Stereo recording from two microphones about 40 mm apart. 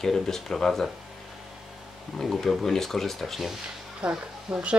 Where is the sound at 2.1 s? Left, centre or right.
Centre.